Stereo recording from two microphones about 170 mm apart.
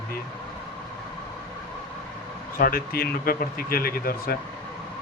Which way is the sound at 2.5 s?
60° left (ahead or behind).